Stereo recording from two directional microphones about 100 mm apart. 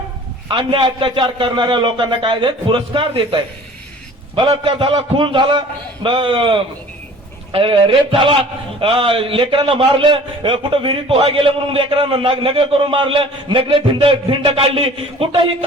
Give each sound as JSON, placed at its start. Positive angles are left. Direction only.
{"t": 0.4, "sound": "a man's voice", "side_deg": -55}